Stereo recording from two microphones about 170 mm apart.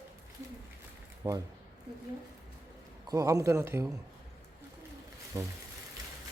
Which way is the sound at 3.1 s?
20° right (ahead or behind).